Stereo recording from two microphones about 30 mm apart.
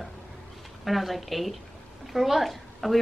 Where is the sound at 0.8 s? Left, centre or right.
Centre.